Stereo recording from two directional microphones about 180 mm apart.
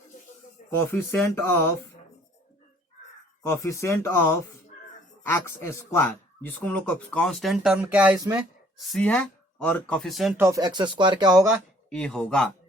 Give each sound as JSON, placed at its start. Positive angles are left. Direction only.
{"t": 0.9, "sound": "speech", "side_deg": 10}
{"t": 3.4, "sound": "speech", "side_deg": 15}
{"t": 10.3, "sound": "speech", "side_deg": -15}
{"t": 11.4, "sound": "speech", "side_deg": 0}